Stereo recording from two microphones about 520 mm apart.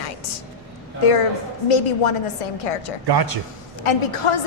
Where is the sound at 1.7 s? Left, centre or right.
Left.